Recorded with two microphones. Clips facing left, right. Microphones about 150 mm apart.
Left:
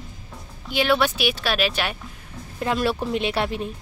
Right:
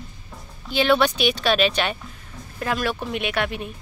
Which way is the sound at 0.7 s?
10° left (ahead or behind).